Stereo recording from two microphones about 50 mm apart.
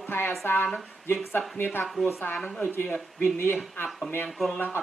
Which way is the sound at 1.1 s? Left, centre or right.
Left.